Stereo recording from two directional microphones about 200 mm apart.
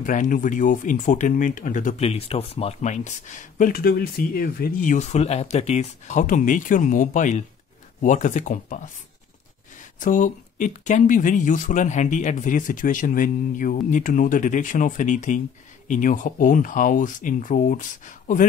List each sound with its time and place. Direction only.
0.0 s speech: 40° left (ahead or behind)
9.9 s speech: 40° left (ahead or behind)